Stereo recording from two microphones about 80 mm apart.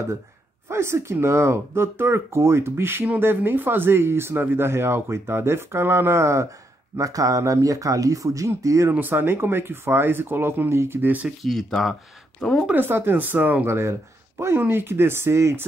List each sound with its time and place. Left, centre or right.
0.7 s speech: right
7.0 s speech: right
8.9 s speech: right
11.4 s speech: centre
12.7 s speech: right
13.7 s speech: right